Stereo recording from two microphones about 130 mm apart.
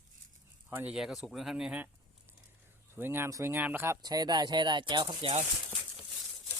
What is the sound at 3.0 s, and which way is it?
Speech, 15° right (ahead or behind).